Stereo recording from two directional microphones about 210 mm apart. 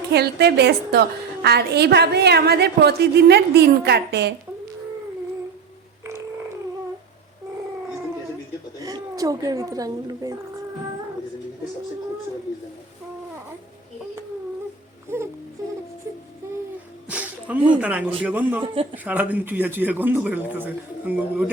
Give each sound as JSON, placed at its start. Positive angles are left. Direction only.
{"t": 0.1, "sound": "a woman's voice", "side_deg": -50}
{"t": 8.8, "sound": "a woman's voice", "side_deg": -15}
{"t": 15.1, "sound": "music", "side_deg": -10}
{"t": 17.1, "sound": "a sound", "side_deg": -5}
{"t": 17.7, "sound": "speech", "side_deg": -5}
{"t": 18.6, "sound": "speech", "side_deg": -25}
{"t": 19.0, "sound": "speech", "side_deg": -5}